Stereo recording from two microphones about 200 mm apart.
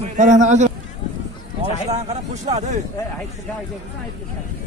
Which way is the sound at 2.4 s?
35° right (ahead or behind).